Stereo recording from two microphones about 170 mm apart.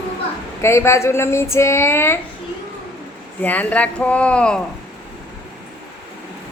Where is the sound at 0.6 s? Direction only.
15° left (ahead or behind).